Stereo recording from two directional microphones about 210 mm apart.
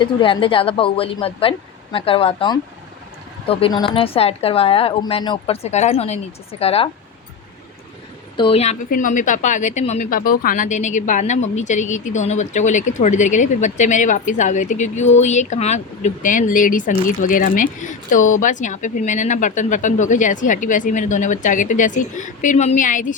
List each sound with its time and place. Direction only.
0.0 s a woman's voice: 25° left (ahead or behind)
8.4 s speech: 25° left (ahead or behind)